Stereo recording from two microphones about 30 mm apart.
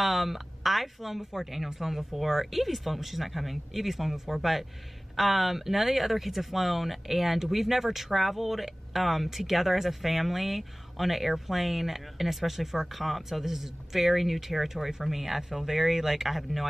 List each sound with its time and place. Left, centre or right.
0.0 s speech: centre